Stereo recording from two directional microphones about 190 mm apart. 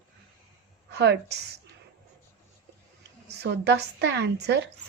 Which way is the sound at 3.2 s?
65° right (ahead or behind).